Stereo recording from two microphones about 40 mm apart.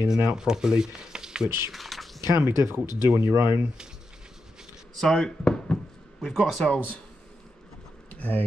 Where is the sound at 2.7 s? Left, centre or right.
Right.